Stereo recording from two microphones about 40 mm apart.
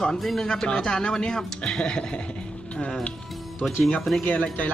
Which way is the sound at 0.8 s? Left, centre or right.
Centre.